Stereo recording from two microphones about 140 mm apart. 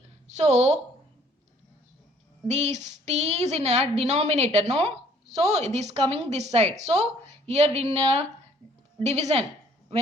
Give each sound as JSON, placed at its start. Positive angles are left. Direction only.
{"t": 0.3, "sound": "a woman's voice", "side_deg": -55}
{"t": 2.5, "sound": "a woman's voice", "side_deg": -55}